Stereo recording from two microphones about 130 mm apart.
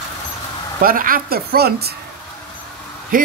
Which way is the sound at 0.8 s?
90° right.